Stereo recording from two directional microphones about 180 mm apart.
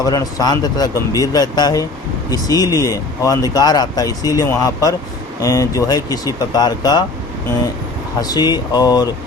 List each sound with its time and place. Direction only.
0.0 s speech: 20° left (ahead or behind)
8.2 s speech: 20° left (ahead or behind)